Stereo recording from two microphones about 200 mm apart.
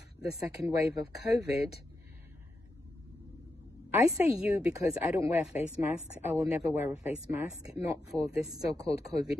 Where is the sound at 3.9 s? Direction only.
10° right (ahead or behind).